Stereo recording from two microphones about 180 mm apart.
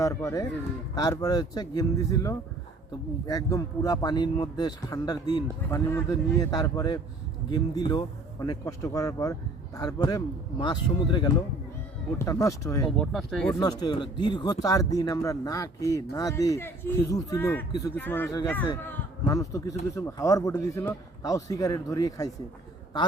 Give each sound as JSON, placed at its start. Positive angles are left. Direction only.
{"t": 0.0, "sound": "a man's voice", "side_deg": 15}
{"t": 13.0, "sound": "speech", "side_deg": 0}
{"t": 13.6, "sound": "speech", "side_deg": 20}
{"t": 17.7, "sound": "speech", "side_deg": 20}
{"t": 17.9, "sound": "a man's voice", "side_deg": 10}